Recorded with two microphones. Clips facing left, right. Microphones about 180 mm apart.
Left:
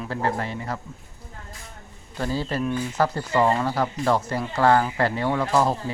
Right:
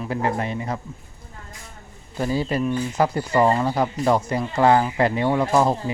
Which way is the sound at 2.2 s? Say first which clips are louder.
Right 3 dB; 15° right (ahead or behind).